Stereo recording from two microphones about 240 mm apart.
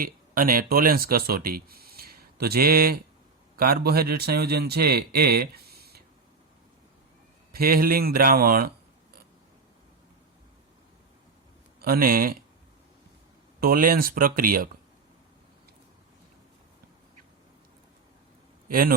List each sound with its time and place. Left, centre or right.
0.0 s a man's voice: right
7.5 s a man's voice: right
11.8 s a man's voice: right
13.6 s a man's voice: right
18.7 s a man's voice: right